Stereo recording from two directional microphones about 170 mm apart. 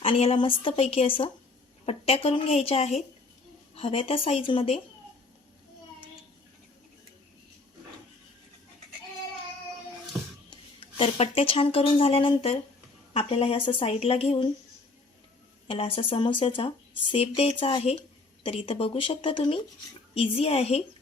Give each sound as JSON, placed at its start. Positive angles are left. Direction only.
{"t": 0.0, "sound": "speech", "side_deg": 35}
{"t": 10.5, "sound": "speech", "side_deg": 30}
{"t": 15.6, "sound": "speech", "side_deg": 35}